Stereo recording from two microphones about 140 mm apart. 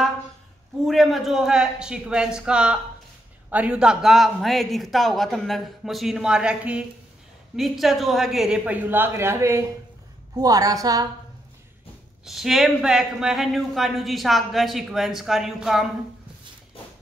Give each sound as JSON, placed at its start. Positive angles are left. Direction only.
{"t": 0.8, "sound": "a woman's voice", "side_deg": 0}
{"t": 12.3, "sound": "speech", "side_deg": 0}